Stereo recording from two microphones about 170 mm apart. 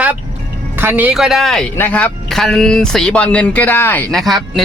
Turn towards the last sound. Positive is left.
turn(degrees=0)  # may be behind; listen again after turning